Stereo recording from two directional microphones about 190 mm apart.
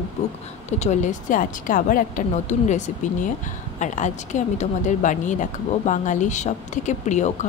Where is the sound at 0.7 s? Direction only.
35° left (ahead or behind).